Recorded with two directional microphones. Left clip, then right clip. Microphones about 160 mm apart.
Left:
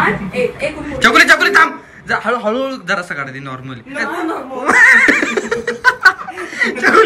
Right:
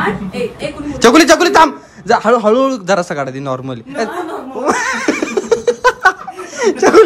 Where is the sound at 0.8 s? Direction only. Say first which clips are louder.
Right 1 dB; 35° right (ahead or behind).